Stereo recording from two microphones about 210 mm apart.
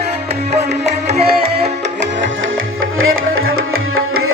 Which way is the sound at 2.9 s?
75° right (ahead or behind).